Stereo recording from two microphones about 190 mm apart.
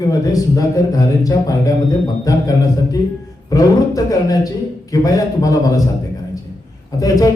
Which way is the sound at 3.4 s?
20° left (ahead or behind).